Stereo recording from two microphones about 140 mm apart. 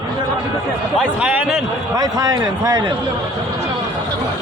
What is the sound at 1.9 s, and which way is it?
A man's voice, 25° right (ahead or behind).